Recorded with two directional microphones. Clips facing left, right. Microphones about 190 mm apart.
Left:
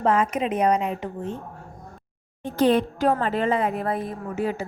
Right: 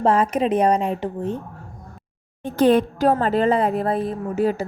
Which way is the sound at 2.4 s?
50° right (ahead or behind).